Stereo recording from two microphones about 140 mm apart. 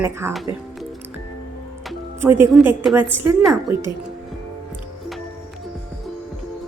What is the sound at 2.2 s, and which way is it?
Speech, 15° right (ahead or behind).